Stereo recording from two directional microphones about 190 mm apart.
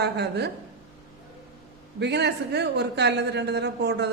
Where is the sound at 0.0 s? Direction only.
60° right (ahead or behind).